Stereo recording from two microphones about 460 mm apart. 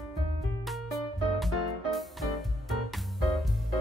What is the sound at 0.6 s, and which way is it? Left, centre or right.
Music, centre.